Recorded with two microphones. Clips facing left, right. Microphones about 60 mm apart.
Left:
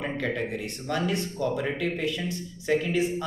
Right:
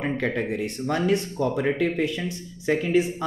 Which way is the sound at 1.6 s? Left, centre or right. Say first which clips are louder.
Right 5 dB; right.